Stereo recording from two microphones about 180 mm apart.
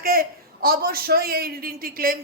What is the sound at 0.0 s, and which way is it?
A man's voice, 55° right (ahead or behind).